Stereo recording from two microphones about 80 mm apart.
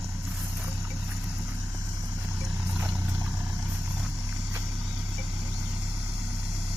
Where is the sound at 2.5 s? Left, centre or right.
Centre.